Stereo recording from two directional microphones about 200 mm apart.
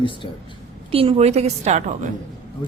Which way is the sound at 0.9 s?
30° right (ahead or behind).